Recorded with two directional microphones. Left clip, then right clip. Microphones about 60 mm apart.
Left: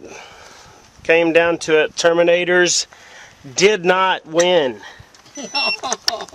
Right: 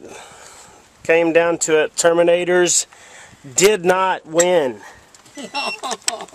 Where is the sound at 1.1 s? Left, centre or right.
Centre.